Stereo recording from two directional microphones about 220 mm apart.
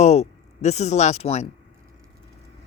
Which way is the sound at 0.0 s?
30° left (ahead or behind).